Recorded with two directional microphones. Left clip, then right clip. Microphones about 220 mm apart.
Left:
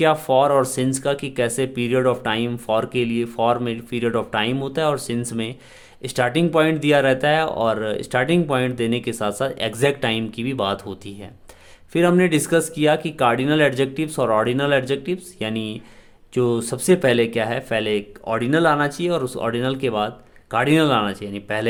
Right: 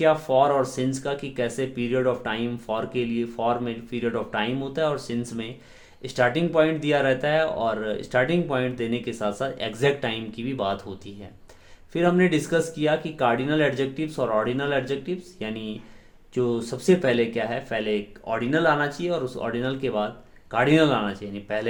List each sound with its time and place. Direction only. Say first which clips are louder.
0.0 s speech: left 3 dB; 35° left (ahead or behind)